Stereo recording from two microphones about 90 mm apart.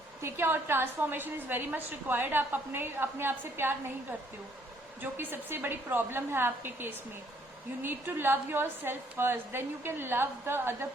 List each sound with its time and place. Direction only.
0.2 s a woman's voice: 25° right (ahead or behind)
5.1 s a woman's voice: 25° right (ahead or behind)